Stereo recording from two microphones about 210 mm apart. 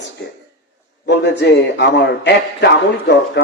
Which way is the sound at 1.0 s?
55° left (ahead or behind).